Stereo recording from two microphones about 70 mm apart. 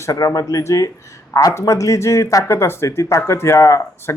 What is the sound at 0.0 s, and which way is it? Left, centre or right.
Speech, left.